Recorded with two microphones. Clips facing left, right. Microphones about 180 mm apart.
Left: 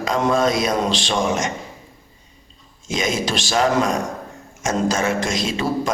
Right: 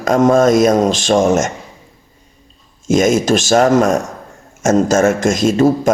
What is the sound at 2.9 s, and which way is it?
Speech, 45° right (ahead or behind).